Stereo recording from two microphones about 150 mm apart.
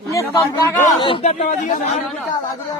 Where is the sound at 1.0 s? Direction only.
35° left (ahead or behind).